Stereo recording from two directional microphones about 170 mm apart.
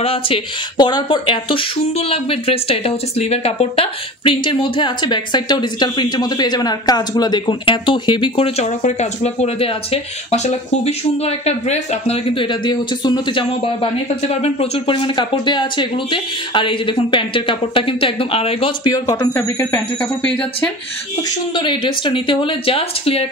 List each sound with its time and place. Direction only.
0.0 s speech: 35° left (ahead or behind); by 20.7 s 5° left (ahead or behind)
21.2 s speech: 30° left (ahead or behind)